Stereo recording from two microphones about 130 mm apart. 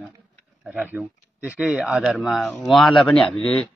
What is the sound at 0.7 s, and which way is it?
A man's voice, 15° right (ahead or behind).